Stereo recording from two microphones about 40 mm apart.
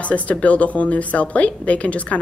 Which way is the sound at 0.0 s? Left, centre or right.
Left.